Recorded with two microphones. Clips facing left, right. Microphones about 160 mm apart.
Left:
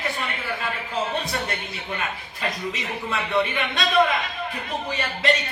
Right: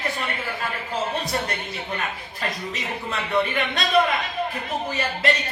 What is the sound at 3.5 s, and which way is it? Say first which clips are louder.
Speech: right 1 dB; 40° right (ahead or behind).